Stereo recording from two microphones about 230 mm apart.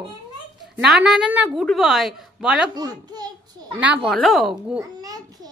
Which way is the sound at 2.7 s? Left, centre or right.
Centre.